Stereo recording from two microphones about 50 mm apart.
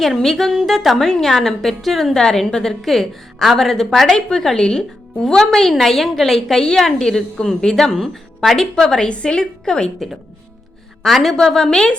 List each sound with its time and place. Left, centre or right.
0.0 s a woman's voice: centre
11.0 s a woman's voice: centre